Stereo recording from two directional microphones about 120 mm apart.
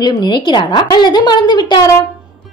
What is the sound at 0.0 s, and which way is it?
A woman's voice, 35° left (ahead or behind).